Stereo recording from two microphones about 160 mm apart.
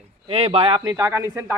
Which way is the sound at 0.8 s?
25° right (ahead or behind).